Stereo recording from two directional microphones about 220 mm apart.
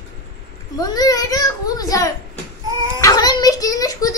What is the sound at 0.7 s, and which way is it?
A child's voice, 15° left (ahead or behind).